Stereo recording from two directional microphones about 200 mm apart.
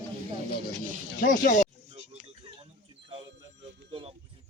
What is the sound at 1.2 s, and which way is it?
Speech, 40° left (ahead or behind).